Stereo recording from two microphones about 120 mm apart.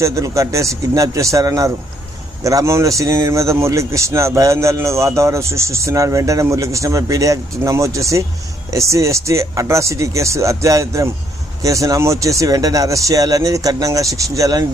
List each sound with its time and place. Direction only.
0.0 s a man's voice: 25° right (ahead or behind)